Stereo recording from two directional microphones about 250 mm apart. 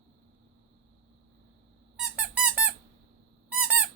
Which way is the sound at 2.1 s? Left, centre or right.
Centre.